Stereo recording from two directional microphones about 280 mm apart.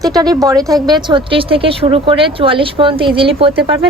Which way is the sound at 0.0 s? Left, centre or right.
Centre.